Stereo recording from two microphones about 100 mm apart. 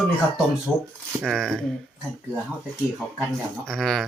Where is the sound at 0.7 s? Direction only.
15° right (ahead or behind).